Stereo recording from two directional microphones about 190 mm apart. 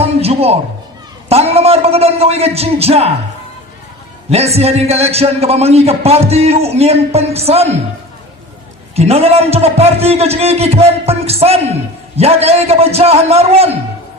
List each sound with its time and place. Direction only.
0.0 s a sound: 30° right (ahead or behind)
1.3 s a man's voice: 30° right (ahead or behind)
4.3 s a man's voice: 35° right (ahead or behind)
9.0 s a man's voice: 35° right (ahead or behind)